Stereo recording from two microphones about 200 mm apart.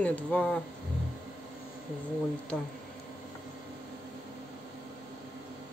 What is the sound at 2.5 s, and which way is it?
Speech, 5° left (ahead or behind).